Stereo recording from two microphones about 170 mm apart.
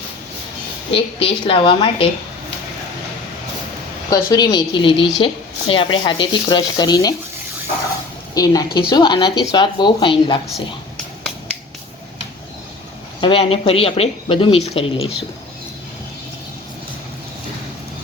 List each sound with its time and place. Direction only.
0.9 s speech: 30° left (ahead or behind)
4.1 s speech: 20° left (ahead or behind)
8.4 s speech: 20° left (ahead or behind)
13.2 s speech: 35° left (ahead or behind)